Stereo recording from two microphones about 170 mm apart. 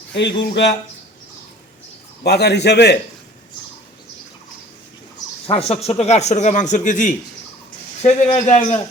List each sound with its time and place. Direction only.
0.1 s speech: 90° left
2.2 s a man's voice: 75° left (ahead or behind)
5.5 s speech: 35° left (ahead or behind)